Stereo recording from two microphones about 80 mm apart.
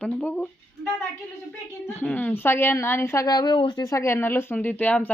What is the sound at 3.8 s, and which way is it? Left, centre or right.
Speech, left.